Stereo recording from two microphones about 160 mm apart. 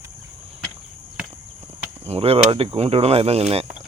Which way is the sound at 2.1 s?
35° right (ahead or behind).